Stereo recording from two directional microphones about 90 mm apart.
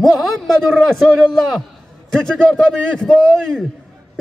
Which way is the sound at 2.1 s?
5° left (ahead or behind).